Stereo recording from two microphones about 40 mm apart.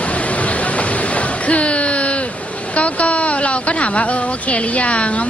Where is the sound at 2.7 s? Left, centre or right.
Left.